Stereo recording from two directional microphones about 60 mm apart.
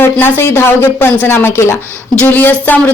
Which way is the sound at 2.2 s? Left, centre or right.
Left.